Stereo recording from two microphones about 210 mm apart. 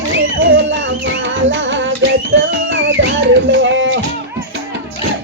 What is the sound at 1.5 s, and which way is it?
Music, 60° right (ahead or behind).